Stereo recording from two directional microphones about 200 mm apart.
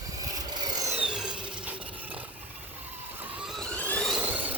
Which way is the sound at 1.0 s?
5° right (ahead or behind).